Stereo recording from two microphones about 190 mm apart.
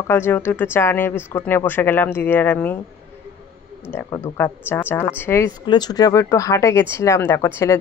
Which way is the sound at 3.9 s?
10° left (ahead or behind).